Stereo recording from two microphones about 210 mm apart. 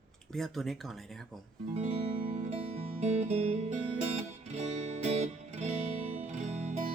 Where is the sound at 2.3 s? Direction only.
35° right (ahead or behind).